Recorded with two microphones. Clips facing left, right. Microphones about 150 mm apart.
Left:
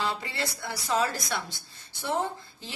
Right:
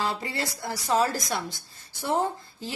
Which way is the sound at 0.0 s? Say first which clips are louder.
Right 2 dB; 45° right (ahead or behind).